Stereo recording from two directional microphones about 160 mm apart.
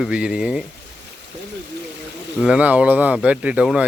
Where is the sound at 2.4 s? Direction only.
5° right (ahead or behind).